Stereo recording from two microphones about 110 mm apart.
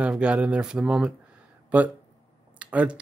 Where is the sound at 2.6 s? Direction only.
10° right (ahead or behind).